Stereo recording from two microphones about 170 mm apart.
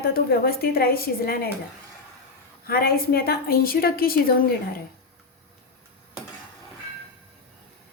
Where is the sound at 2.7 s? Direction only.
60° left (ahead or behind).